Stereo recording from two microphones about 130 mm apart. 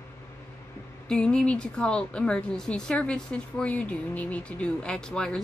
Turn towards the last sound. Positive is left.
turn(degrees=5)  # may be behind; listen again after turning